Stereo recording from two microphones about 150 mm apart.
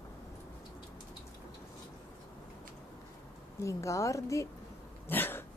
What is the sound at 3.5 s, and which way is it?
Speech, 20° left (ahead or behind).